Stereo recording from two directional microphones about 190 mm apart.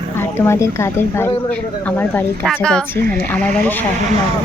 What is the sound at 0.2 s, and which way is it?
Speech, 15° left (ahead or behind).